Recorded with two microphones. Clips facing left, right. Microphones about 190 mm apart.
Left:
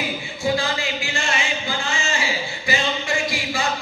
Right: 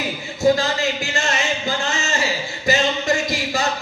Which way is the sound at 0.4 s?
40° right (ahead or behind).